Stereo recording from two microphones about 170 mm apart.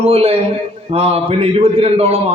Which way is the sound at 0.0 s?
35° right (ahead or behind).